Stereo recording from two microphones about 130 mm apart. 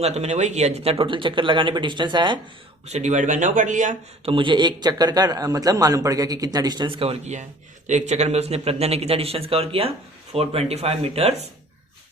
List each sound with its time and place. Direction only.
0.0 s a man's voice: 55° right (ahead or behind); by 2.4 s 35° right (ahead or behind)
2.8 s speech: 60° right (ahead or behind); by 3.9 s 75° right (ahead or behind)
4.3 s a man's voice: 40° right (ahead or behind)